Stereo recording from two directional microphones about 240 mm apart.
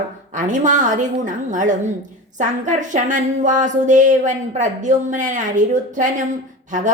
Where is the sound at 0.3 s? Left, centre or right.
Right.